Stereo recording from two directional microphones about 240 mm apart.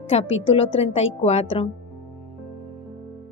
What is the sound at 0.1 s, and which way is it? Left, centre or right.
A woman's voice, left.